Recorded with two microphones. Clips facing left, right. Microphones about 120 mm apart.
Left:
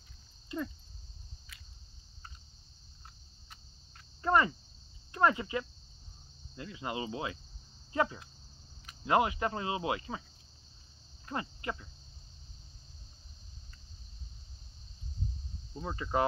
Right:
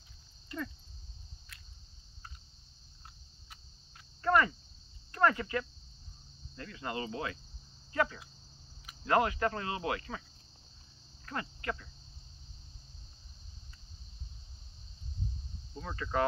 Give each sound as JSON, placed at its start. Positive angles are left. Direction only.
{"t": 0.5, "sound": "cricket", "side_deg": 20}
{"t": 1.5, "sound": "a sound", "side_deg": 0}
{"t": 4.2, "sound": "cricket", "side_deg": 20}
{"t": 5.1, "sound": "speech", "side_deg": 20}
{"t": 9.0, "sound": "cricket", "side_deg": 20}
{"t": 11.2, "sound": "cricket", "side_deg": 20}
{"t": 15.8, "sound": "cricket", "side_deg": 20}